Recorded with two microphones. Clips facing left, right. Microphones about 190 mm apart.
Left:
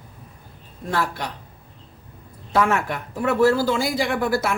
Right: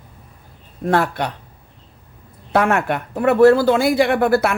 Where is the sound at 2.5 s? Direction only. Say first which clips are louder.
Right 4 dB; 65° right (ahead or behind).